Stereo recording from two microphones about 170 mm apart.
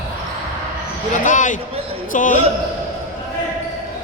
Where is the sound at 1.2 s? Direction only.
50° left (ahead or behind).